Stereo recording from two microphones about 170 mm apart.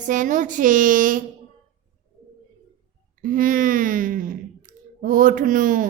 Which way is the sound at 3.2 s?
55° right (ahead or behind).